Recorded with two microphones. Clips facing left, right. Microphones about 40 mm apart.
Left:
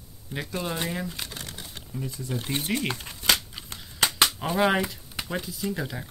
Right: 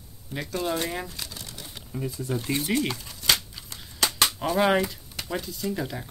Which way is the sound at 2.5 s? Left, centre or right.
Left.